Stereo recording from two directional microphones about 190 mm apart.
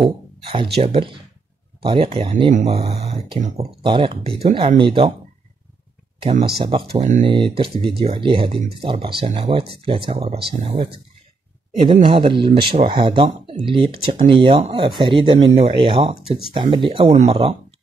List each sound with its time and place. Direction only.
0.0 s speech: 25° right (ahead or behind)
3.8 s speech: 25° right (ahead or behind)
6.6 s speech: 30° right (ahead or behind)
7.2 s speech: 30° right (ahead or behind)